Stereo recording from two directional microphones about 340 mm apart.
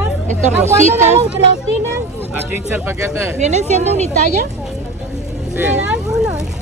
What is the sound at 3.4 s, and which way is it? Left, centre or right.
Speech, centre.